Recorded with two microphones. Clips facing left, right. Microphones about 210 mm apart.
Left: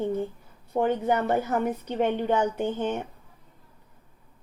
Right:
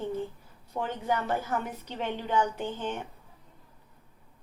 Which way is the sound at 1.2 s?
55° left (ahead or behind).